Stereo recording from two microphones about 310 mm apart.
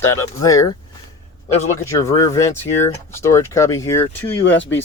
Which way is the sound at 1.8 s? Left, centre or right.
Centre.